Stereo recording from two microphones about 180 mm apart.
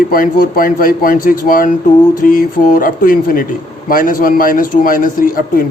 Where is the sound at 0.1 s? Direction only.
50° left (ahead or behind).